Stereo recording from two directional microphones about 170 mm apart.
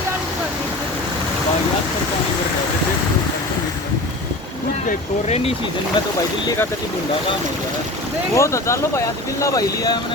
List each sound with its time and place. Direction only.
5.3 s speech: 35° left (ahead or behind)
8.4 s speech: 15° left (ahead or behind)